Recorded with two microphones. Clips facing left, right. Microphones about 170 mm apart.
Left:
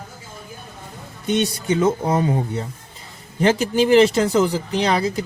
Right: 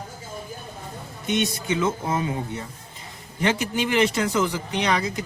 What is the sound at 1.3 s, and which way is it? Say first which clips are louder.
Speech: left 4 dB; 35° left (ahead or behind).